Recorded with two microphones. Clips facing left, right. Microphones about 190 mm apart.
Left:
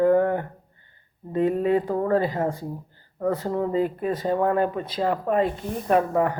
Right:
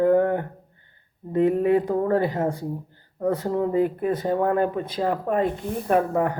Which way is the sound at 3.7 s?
55° right (ahead or behind).